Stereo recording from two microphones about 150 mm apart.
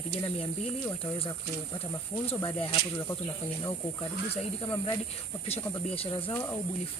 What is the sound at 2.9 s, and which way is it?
Speech, 20° left (ahead or behind).